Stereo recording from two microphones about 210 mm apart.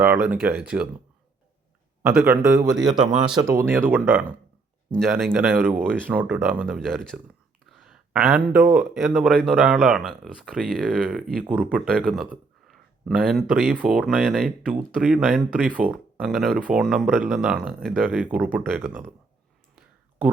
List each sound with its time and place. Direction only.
0.0 s speech: 10° right (ahead or behind)
2.0 s speech: 10° right (ahead or behind)
2.6 s speech: centre (ahead or behind)
4.9 s speech: centre (ahead or behind)